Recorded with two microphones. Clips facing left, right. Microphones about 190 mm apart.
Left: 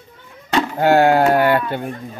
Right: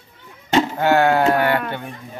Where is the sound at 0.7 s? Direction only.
40° left (ahead or behind).